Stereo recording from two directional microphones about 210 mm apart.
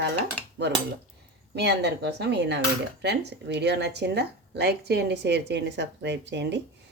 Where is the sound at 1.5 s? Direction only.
55° right (ahead or behind).